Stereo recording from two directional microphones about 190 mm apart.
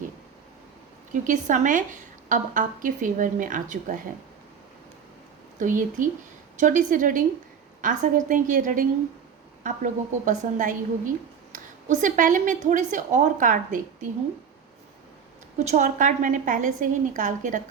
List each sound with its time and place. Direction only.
1.1 s a woman's voice: 40° right (ahead or behind)
5.5 s a woman's voice: 45° right (ahead or behind)
15.5 s a woman's voice: 40° right (ahead or behind)